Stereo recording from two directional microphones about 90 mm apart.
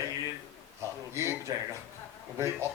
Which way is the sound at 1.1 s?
30° right (ahead or behind).